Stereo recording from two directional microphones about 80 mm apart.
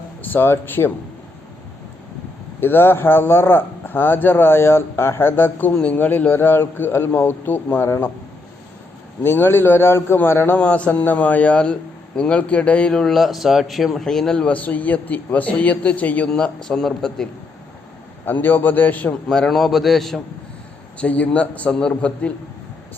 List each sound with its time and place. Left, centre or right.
0.2 s speech: left
2.6 s speech: left
9.2 s speech: left
10.6 s a man's voice: centre
18.3 s speech: left
19.4 s a man's voice: centre
21.0 s a man's voice: centre